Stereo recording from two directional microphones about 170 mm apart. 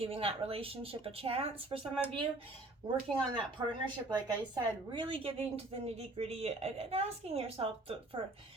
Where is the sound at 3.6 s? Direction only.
25° right (ahead or behind).